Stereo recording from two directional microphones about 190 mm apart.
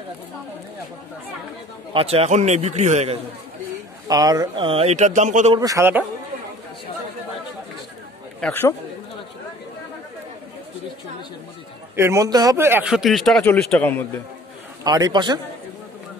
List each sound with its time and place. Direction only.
2.0 s speech: 30° right (ahead or behind)
4.1 s speech: 20° right (ahead or behind); by 5.6 s 40° right (ahead or behind)
5.6 s a man's voice: 15° right (ahead or behind)
8.4 s a man's voice: 10° left (ahead or behind)
12.0 s speech: 15° right (ahead or behind); by 14.2 s 10° left (ahead or behind)
14.8 s a man's voice: 20° right (ahead or behind)